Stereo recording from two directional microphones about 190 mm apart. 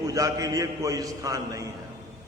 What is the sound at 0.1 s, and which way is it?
A man's voice, 20° right (ahead or behind).